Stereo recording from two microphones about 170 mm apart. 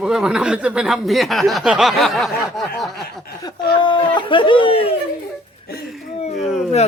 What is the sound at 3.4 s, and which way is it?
Speech, 25° left (ahead or behind).